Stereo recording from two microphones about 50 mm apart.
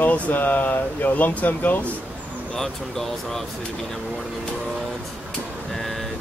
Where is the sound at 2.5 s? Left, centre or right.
Centre.